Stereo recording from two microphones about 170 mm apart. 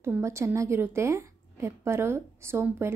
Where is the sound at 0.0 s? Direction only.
15° right (ahead or behind).